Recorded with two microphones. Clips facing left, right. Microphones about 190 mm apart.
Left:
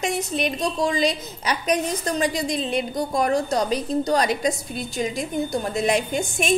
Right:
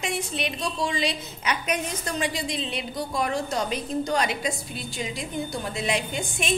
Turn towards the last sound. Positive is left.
turn(degrees=45)  # may be behind; listen again after turning